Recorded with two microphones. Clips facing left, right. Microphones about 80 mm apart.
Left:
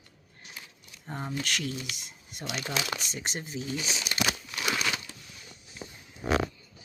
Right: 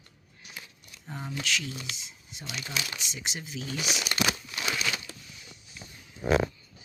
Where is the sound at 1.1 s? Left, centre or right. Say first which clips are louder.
Left 2 dB; left.